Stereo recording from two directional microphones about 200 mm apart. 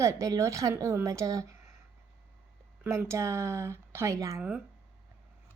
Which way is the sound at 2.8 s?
15° right (ahead or behind).